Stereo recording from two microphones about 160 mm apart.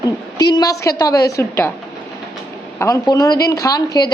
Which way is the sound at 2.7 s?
20° left (ahead or behind).